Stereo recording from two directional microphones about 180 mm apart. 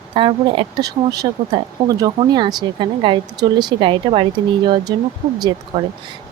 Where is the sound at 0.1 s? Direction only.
30° right (ahead or behind).